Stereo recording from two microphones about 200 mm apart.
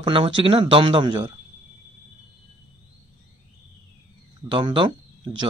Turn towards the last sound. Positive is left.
turn(degrees=-25)  # may be behind; listen again after turning